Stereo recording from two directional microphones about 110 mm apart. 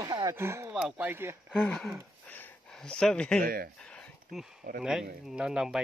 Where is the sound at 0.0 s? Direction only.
30° right (ahead or behind).